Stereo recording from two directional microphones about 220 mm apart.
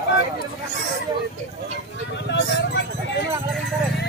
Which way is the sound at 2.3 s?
50° left (ahead or behind).